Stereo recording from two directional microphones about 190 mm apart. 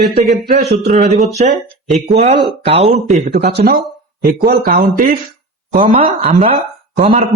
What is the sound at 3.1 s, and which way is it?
A man's voice, 45° right (ahead or behind).